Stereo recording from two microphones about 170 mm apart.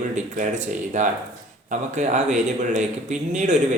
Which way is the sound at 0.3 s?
50° right (ahead or behind).